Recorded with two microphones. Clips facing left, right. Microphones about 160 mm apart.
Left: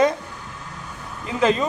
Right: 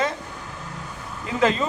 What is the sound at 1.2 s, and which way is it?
Speech, 20° left (ahead or behind).